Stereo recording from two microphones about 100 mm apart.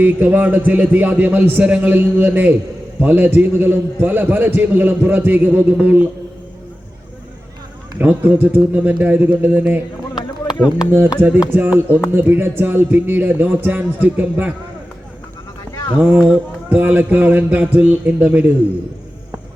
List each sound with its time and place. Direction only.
0.0 s a man's voice: 20° right (ahead or behind)
7.9 s a man's voice: 20° right (ahead or behind)
11.2 s a man's voice: 20° right (ahead or behind)
16.0 s a man's voice: 20° right (ahead or behind)